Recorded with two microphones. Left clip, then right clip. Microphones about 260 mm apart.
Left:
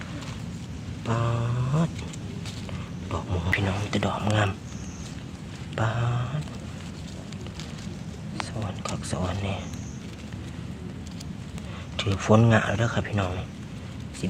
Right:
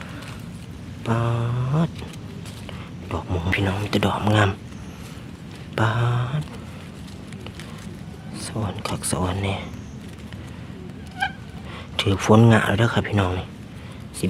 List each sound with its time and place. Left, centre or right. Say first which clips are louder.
1.0 s a sound: right 4 dB; right
3.1 s speech: right 3 dB; right
5.7 s speech: right 6 dB; right
8.6 s speech: right 5 dB; right
11.9 s speech: right 5 dB; right